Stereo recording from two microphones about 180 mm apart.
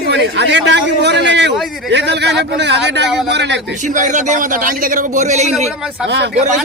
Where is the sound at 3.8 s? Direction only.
45° right (ahead or behind).